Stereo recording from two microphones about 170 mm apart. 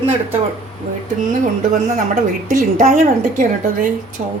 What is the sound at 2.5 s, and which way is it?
A woman's voice, 50° right (ahead or behind).